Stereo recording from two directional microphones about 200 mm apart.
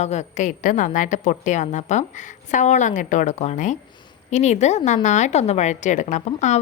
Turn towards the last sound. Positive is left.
turn(degrees=35)  # may be behind; listen again after turning